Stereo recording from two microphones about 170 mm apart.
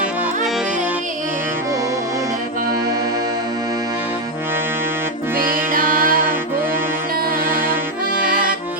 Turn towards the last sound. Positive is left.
turn(degrees=-60)  # may be behind; listen again after turning